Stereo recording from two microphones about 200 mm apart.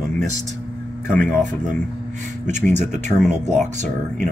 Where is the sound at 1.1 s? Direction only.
5° left (ahead or behind).